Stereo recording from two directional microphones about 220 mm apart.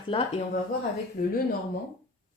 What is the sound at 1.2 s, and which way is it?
Speech, 35° left (ahead or behind).